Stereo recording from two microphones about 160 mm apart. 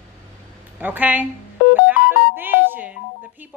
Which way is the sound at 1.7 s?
10° right (ahead or behind).